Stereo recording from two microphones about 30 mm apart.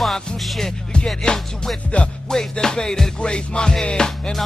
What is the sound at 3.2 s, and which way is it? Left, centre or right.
Music, left.